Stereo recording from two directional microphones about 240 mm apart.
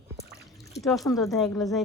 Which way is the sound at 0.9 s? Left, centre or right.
Centre.